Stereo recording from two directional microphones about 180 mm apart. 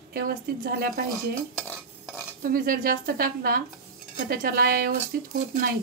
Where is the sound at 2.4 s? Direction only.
50° right (ahead or behind).